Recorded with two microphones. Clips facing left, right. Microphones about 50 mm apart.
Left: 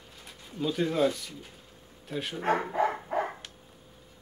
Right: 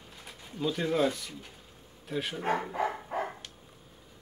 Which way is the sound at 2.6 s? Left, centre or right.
Left.